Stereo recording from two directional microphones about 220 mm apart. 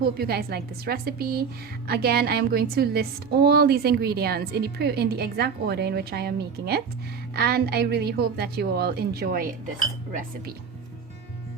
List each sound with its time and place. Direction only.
0.2 s a woman's voice: 45° right (ahead or behind)